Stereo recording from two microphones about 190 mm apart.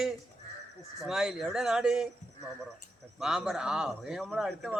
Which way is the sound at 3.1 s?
5° right (ahead or behind).